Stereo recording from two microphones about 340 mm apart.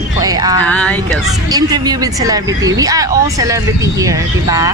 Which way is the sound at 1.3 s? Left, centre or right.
Centre.